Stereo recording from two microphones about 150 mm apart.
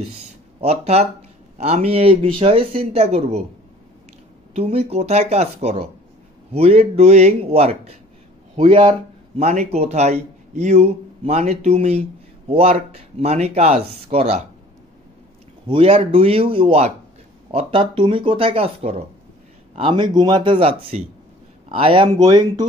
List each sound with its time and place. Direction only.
0.6 s speech: 45° right (ahead or behind)
4.6 s speech: 40° right (ahead or behind)
9.4 s speech: 45° right (ahead or behind)
15.6 s speech: 35° right (ahead or behind)